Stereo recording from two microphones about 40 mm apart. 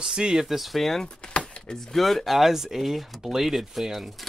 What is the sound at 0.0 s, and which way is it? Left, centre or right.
Speech, centre.